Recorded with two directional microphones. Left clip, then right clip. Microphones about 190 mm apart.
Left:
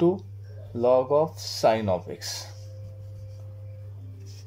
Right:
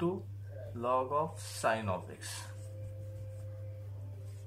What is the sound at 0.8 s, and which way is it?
Speech, 40° left (ahead or behind).